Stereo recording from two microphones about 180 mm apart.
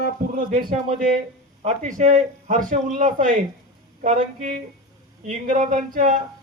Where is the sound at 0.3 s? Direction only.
50° right (ahead or behind).